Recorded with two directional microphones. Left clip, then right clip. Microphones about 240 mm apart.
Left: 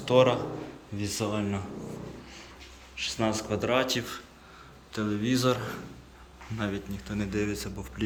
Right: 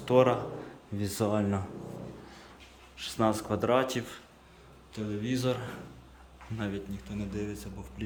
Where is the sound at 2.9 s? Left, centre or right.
Right.